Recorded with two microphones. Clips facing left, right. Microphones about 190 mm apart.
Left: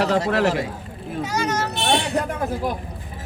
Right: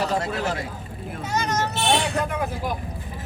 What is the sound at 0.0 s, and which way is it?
Speech, 75° left (ahead or behind).